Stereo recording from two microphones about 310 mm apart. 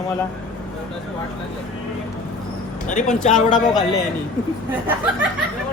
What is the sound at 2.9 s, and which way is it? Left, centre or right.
Speech, left.